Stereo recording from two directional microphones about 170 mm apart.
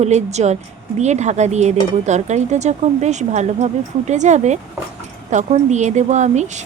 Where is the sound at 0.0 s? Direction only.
40° right (ahead or behind).